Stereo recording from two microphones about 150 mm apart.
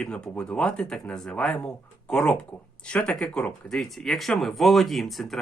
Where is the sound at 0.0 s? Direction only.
5° left (ahead or behind).